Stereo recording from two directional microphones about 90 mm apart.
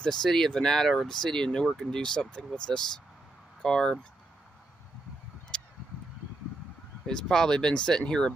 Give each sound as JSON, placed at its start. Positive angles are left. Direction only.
{"t": 0.0, "sound": "speech", "side_deg": 5}
{"t": 5.5, "sound": "a sound", "side_deg": 10}
{"t": 7.1, "sound": "speech", "side_deg": 5}